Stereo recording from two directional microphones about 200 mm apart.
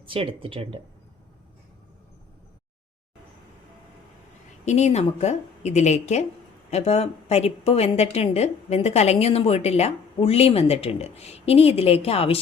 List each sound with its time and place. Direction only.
0.0 s speech: 25° right (ahead or behind)
4.6 s a woman's voice: 35° left (ahead or behind)